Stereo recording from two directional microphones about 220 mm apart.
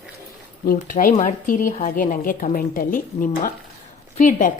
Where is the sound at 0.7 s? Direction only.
40° left (ahead or behind).